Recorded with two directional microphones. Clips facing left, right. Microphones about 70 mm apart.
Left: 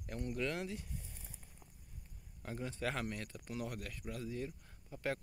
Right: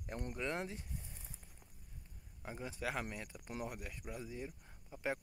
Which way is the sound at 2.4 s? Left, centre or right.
Centre.